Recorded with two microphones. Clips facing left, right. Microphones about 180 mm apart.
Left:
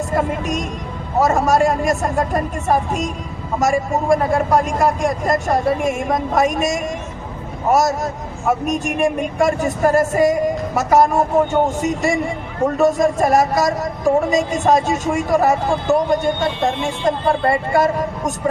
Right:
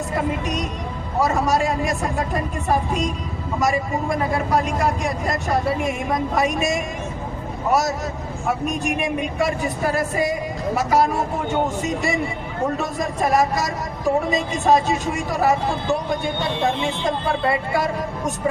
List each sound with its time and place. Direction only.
0.1 s speech: 50° left (ahead or behind)
12.8 s speech: 45° left (ahead or behind)